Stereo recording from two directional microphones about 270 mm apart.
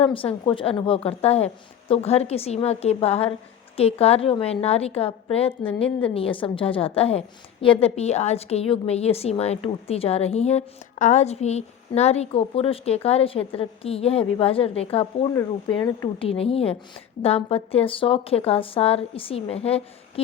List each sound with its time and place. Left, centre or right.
0.0 s a woman's voice: centre
15.3 s a woman's voice: centre